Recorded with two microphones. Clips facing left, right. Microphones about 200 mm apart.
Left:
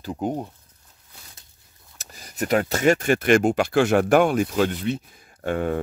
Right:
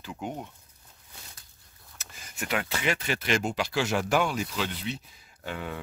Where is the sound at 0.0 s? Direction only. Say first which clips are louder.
Left 9 dB; 40° left (ahead or behind).